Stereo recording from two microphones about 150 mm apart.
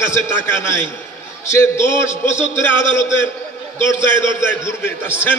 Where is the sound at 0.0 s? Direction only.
15° left (ahead or behind).